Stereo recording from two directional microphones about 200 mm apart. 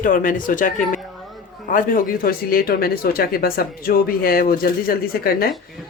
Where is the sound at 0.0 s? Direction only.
45° left (ahead or behind).